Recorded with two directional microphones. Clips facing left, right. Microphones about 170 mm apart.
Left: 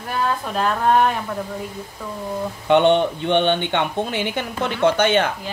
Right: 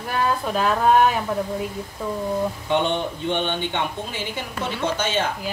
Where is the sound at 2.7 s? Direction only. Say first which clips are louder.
Left 9 dB; 65° left (ahead or behind).